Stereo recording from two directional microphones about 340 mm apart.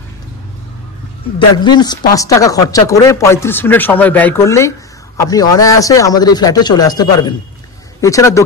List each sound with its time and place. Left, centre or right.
1.6 s speech: centre